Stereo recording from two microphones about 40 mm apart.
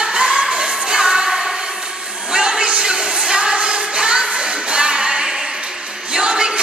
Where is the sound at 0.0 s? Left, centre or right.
Centre.